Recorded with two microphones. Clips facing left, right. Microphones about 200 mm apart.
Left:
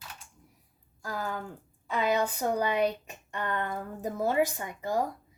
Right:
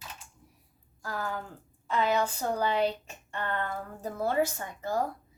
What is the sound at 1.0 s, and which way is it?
Speech, 15° left (ahead or behind).